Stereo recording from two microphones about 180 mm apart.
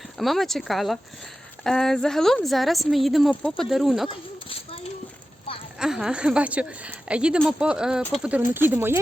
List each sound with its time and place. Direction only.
0.2 s speech: centre (ahead or behind)
4.1 s a sound: 30° left (ahead or behind)
5.8 s speech: 5° right (ahead or behind)